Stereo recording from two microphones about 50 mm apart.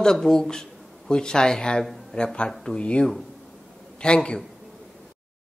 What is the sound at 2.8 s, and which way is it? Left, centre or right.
Speech, left.